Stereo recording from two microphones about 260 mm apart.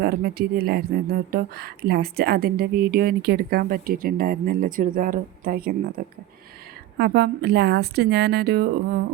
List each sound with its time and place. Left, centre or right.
0.0 s a woman's voice: right